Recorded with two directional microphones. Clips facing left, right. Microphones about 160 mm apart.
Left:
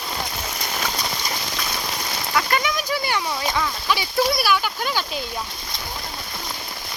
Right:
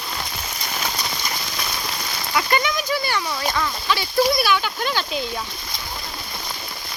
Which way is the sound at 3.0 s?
15° left (ahead or behind).